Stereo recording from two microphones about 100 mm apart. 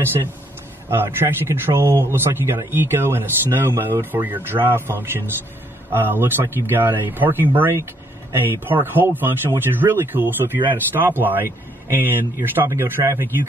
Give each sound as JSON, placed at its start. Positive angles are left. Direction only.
{"t": 0.8, "sound": "speech", "side_deg": -25}